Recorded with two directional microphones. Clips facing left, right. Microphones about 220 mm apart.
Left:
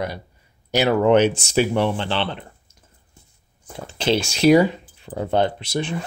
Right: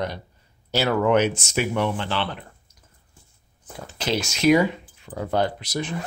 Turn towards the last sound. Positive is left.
turn(degrees=30)  # may be behind; listen again after turning